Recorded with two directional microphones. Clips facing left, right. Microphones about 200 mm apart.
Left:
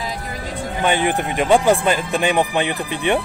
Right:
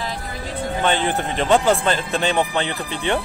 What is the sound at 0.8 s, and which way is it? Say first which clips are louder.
Speech: left 3 dB; 15° left (ahead or behind).